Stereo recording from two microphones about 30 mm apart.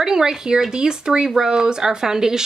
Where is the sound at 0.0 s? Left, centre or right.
Centre.